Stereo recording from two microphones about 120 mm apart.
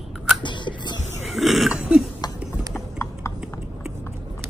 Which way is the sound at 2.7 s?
20° left (ahead or behind).